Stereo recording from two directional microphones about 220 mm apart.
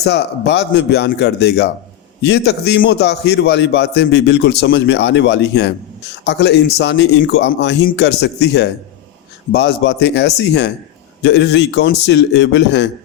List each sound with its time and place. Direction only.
0.0 s a man's voice: 50° left (ahead or behind)